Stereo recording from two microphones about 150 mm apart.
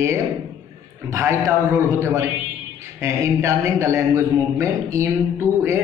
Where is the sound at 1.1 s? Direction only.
20° right (ahead or behind).